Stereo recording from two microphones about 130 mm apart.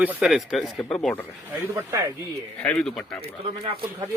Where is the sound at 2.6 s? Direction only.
5° left (ahead or behind).